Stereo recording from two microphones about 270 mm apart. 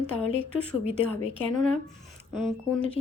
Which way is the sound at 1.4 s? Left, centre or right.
Right.